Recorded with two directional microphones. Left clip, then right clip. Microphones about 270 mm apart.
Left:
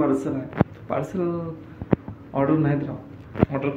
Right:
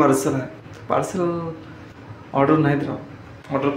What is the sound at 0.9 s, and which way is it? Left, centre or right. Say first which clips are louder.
Speech: right 5 dB; centre.